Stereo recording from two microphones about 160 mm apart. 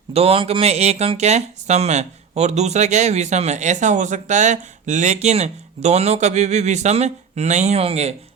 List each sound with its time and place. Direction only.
0.1 s speech: 40° right (ahead or behind)